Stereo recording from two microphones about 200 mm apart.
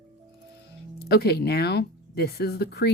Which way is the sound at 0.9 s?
50° left (ahead or behind).